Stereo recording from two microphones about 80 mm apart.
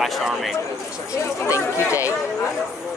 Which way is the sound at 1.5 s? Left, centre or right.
Left.